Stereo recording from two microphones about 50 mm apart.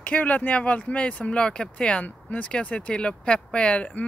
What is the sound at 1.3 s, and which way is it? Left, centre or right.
Speech, left.